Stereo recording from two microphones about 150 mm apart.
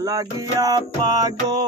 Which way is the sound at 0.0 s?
25° right (ahead or behind).